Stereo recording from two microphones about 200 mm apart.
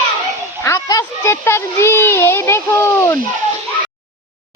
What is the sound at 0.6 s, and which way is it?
A child's voice, 15° left (ahead or behind).